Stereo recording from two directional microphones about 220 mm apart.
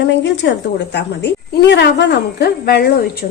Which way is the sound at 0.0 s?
55° left (ahead or behind).